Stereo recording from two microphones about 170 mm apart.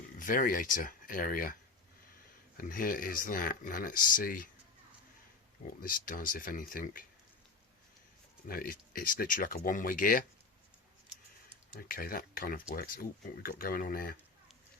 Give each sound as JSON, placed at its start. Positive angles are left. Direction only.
{"t": 0.2, "sound": "speech", "side_deg": 55}
{"t": 2.6, "sound": "speech", "side_deg": 55}
{"t": 5.8, "sound": "speech", "side_deg": 55}
{"t": 8.4, "sound": "speech", "side_deg": 60}
{"t": 11.8, "sound": "speech", "side_deg": 60}